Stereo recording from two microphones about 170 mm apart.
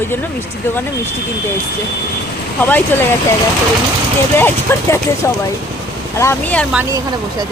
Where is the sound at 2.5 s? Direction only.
10° left (ahead or behind).